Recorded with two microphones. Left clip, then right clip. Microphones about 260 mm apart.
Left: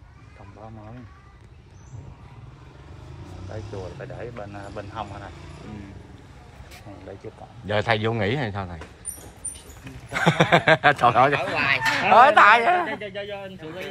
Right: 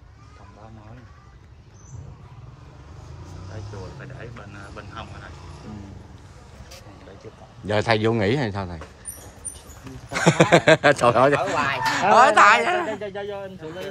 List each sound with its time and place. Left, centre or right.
7.6 s speech: centre
10.1 s speech: centre